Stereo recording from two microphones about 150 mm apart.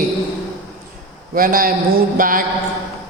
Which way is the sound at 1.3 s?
70° right (ahead or behind).